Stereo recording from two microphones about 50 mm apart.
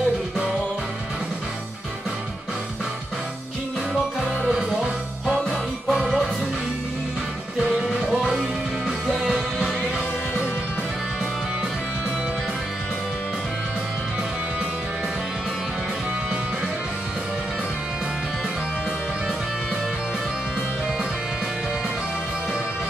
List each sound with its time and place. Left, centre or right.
4.5 s music: centre
9.2 s music: centre